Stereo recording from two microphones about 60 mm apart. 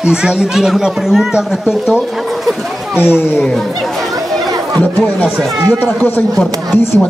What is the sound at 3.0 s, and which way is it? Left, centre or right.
Speech, left.